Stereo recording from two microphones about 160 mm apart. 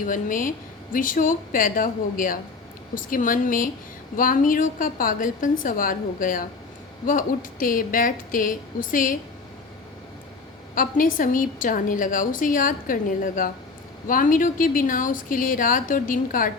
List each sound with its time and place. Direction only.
0.0 s a woman's voice: 55° left (ahead or behind)
10.8 s a woman's voice: 60° left (ahead or behind)